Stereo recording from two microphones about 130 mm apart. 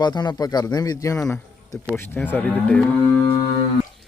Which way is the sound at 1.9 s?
15° left (ahead or behind).